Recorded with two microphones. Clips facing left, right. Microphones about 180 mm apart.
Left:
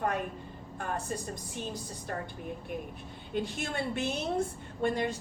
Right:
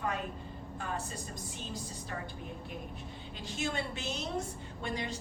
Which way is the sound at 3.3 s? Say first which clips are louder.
Left 4 dB; 55° left (ahead or behind).